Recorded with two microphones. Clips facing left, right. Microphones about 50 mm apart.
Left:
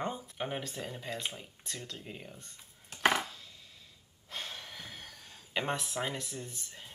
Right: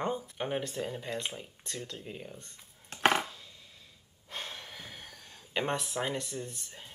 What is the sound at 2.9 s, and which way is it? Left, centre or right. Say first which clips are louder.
Chopping: right 2 dB; right.